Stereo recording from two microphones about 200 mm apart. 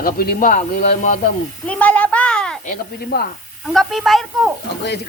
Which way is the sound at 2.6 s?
45° left (ahead or behind).